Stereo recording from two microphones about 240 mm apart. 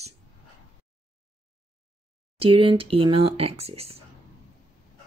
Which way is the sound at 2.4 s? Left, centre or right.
Right.